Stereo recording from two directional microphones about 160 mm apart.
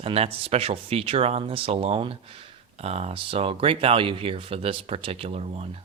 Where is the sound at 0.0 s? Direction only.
40° right (ahead or behind).